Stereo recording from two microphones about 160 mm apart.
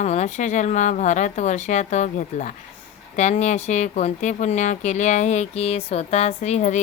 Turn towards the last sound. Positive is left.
turn(degrees=45)  # may be behind; listen again after turning